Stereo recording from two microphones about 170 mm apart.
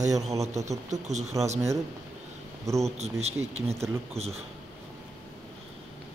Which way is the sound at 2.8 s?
40° right (ahead or behind).